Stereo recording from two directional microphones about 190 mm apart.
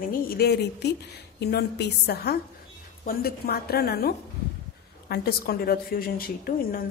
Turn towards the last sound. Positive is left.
turn(degrees=50)  # may be behind; listen again after turning